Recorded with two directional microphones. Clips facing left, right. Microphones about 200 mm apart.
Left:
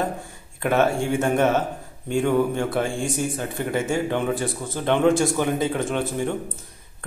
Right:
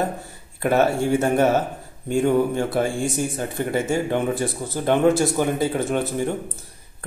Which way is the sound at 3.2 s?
45° right (ahead or behind).